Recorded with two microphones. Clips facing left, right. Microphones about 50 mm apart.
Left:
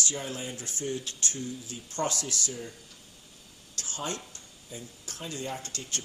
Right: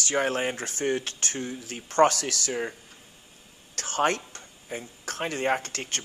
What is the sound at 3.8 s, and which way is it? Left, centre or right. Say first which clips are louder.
Speech: right 11 dB; right.